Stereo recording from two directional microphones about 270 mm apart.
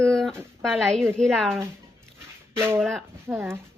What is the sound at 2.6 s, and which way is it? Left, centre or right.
Speech, centre.